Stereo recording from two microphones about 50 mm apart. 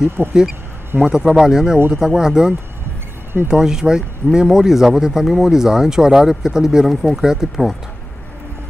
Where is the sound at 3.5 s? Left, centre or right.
Centre.